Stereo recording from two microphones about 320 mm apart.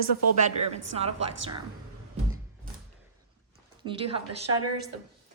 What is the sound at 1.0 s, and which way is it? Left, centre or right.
Speech, centre.